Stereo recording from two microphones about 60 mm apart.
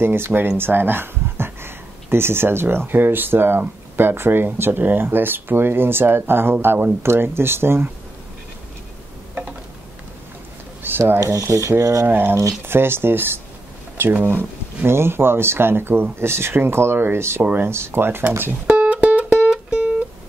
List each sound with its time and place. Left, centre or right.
0.0 s speech: right
10.8 s a sound: right
11.4 s speech: right
12.1 s speech: right
18.7 s music: right